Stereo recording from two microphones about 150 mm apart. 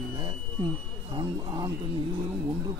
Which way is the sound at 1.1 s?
30° right (ahead or behind).